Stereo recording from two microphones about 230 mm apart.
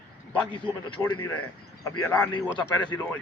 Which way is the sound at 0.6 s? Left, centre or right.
Centre.